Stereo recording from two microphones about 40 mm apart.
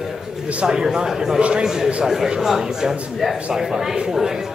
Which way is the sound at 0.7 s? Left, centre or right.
Centre.